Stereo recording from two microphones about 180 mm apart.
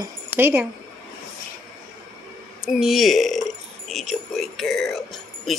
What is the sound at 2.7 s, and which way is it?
Speech, centre (ahead or behind).